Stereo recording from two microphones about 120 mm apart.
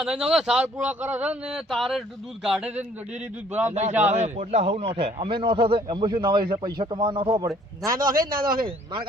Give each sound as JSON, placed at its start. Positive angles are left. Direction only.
{"t": 0.0, "sound": "speech", "side_deg": -5}
{"t": 3.7, "sound": "a man's voice", "side_deg": -70}
{"t": 7.9, "sound": "a man's voice", "side_deg": -30}